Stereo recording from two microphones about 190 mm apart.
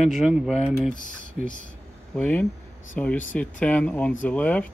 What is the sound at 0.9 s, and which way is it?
Typing, 45° left (ahead or behind).